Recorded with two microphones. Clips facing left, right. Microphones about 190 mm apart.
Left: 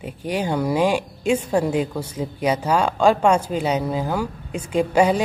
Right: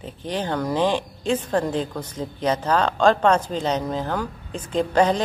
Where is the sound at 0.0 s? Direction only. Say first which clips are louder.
Left 3 dB; 10° left (ahead or behind).